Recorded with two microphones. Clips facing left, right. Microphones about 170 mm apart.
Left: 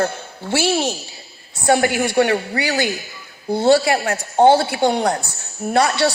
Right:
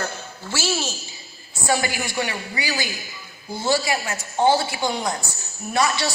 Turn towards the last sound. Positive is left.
turn(degrees=65)  # may be behind; listen again after turning